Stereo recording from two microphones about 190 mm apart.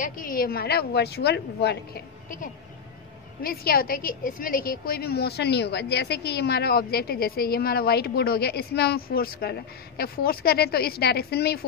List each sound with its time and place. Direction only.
0.0 s a woman's voice: 45° left (ahead or behind)